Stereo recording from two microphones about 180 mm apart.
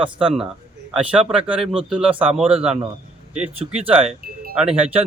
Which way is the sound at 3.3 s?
35° right (ahead or behind).